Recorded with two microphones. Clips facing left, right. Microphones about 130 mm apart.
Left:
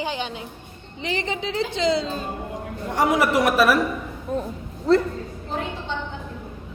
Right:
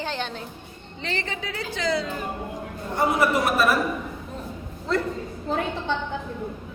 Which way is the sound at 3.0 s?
90° left.